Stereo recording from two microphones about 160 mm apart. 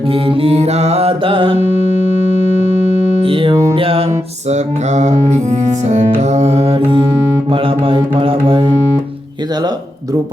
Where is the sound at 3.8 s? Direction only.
35° right (ahead or behind).